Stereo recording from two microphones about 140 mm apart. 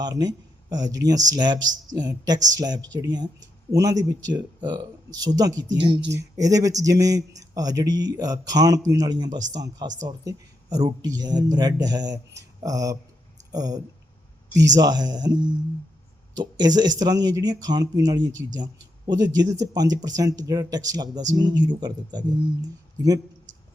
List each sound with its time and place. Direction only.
0.0 s speech: 30° right (ahead or behind)